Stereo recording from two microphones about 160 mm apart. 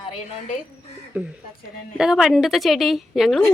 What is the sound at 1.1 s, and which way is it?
A woman's voice, 10° right (ahead or behind).